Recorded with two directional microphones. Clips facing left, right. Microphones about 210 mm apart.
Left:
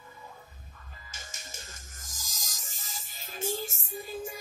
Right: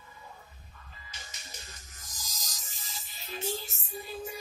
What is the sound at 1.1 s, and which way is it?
Music, 45° left (ahead or behind).